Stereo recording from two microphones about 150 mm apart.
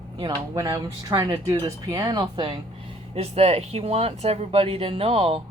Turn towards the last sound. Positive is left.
turn(degrees=-40)  # may be behind; listen again after turning